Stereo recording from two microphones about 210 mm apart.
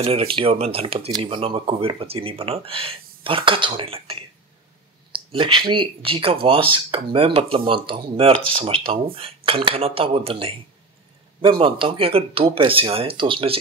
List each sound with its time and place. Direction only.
0.0 s speech: 25° right (ahead or behind)